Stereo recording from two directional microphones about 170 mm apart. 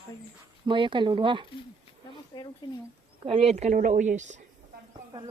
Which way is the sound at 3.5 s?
50° right (ahead or behind).